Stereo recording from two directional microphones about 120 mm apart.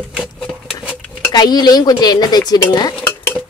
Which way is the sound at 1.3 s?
35° left (ahead or behind).